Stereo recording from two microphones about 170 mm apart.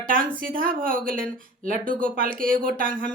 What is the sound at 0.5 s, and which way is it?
A woman's voice, 55° right (ahead or behind).